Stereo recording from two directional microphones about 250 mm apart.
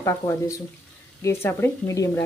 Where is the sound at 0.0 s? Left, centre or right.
Centre.